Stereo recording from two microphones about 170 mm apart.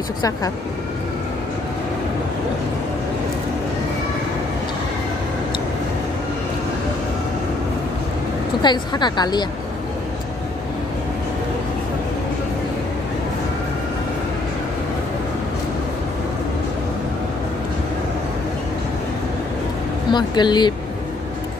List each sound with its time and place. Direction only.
8.6 s a woman's voice: 25° left (ahead or behind)
20.1 s a woman's voice: 25° left (ahead or behind)